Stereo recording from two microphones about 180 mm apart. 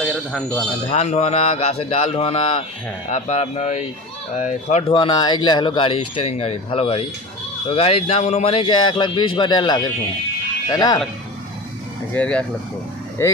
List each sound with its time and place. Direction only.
0.0 s a sound: 5° left (ahead or behind)
0.8 s a man's voice: 40° left (ahead or behind)
4.9 s a man's voice: 25° left (ahead or behind)
12.1 s speech: 10° left (ahead or behind)